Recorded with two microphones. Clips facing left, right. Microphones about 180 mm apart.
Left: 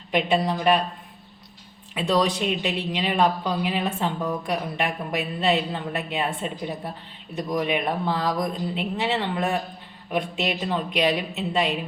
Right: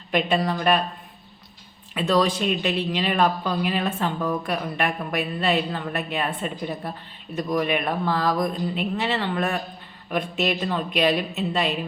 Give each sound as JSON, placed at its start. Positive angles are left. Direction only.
{"t": 0.1, "sound": "speech", "side_deg": 15}
{"t": 2.0, "sound": "speech", "side_deg": 15}